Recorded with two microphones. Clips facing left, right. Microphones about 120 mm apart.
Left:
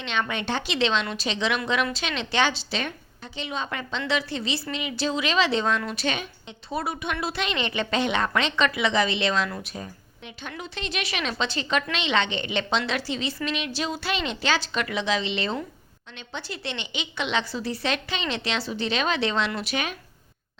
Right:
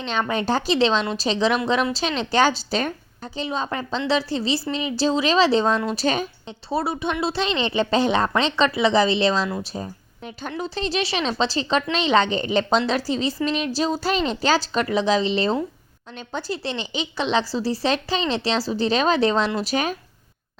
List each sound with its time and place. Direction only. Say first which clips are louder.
0.0 s a woman's voice: right 5 dB; 35° right (ahead or behind)